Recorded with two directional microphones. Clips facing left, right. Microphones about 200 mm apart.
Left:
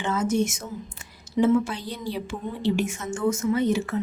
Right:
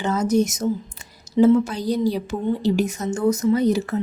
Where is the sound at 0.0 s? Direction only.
40° right (ahead or behind).